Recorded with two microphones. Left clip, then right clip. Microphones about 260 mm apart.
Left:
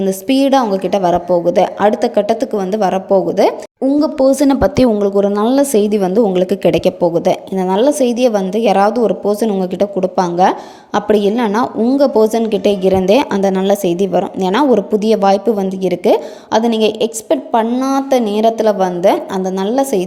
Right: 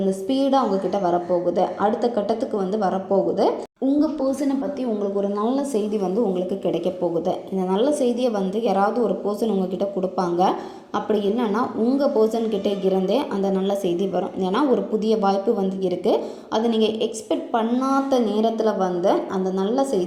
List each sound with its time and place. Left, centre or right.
0.0 s a woman's voice: left